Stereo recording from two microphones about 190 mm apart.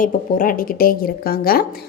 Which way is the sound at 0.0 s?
45° left (ahead or behind).